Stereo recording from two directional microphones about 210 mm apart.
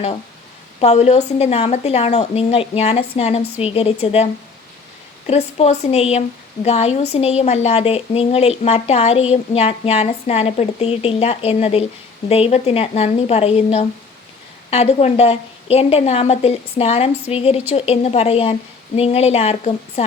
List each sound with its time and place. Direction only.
0.8 s a woman's voice: 30° left (ahead or behind)
5.3 s a woman's voice: 30° left (ahead or behind)